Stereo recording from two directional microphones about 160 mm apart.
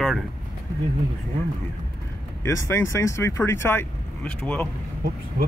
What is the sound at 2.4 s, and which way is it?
Speech, 15° left (ahead or behind).